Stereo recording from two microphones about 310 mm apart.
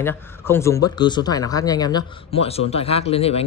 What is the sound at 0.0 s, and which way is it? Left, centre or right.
Speech, centre.